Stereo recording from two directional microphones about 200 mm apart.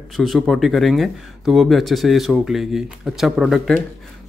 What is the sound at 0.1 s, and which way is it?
Speech, centre (ahead or behind).